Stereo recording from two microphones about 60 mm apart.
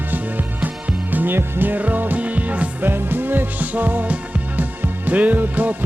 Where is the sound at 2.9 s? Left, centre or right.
Right.